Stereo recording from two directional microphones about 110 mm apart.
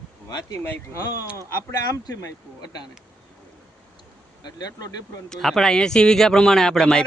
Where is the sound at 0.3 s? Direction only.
35° left (ahead or behind).